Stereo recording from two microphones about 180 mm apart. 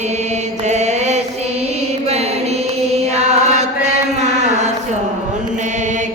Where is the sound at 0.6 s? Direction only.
40° right (ahead or behind).